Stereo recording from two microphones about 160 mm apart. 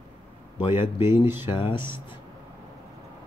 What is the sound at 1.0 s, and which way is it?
Speech, 15° right (ahead or behind).